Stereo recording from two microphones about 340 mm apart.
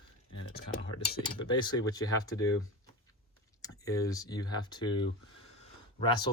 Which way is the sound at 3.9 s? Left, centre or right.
Centre.